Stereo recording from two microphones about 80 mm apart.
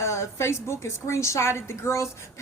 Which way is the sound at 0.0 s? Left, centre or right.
Left.